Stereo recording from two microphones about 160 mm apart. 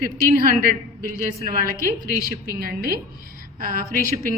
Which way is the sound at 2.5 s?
65° right (ahead or behind).